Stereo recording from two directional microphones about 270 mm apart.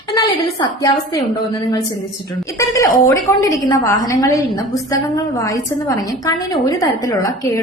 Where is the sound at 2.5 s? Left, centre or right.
Centre.